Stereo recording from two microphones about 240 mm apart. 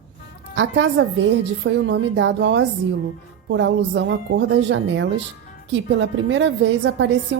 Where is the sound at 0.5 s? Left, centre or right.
Right.